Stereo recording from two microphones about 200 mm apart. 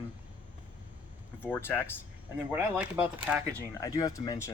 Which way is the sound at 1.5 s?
10° left (ahead or behind).